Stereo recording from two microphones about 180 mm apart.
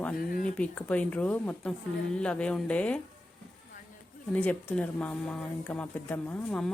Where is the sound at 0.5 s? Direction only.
5° left (ahead or behind).